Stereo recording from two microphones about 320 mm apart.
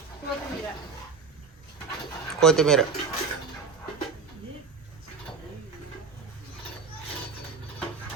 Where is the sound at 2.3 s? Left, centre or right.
Centre.